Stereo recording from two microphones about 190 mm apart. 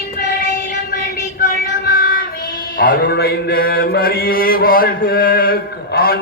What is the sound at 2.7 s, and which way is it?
Mantra, 50° left (ahead or behind).